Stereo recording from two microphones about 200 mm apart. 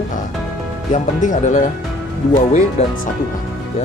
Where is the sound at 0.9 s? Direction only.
40° left (ahead or behind).